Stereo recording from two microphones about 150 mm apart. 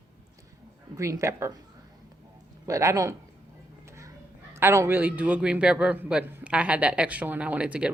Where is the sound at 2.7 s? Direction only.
20° right (ahead or behind).